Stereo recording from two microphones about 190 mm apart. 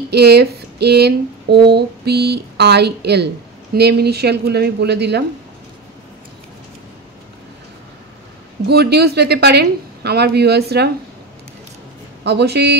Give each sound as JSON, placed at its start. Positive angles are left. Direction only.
{"t": 0.1, "sound": "a sound", "side_deg": -60}
{"t": 1.7, "sound": "a woman's voice", "side_deg": -60}
{"t": 8.6, "sound": "a woman's voice", "side_deg": -60}
{"t": 12.2, "sound": "a woman's voice", "side_deg": -60}